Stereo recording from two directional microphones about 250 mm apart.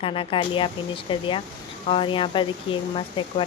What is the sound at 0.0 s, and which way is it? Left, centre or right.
Speech, left.